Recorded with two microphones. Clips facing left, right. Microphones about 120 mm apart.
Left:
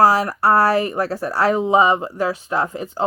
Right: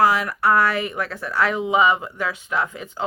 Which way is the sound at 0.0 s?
35° left (ahead or behind).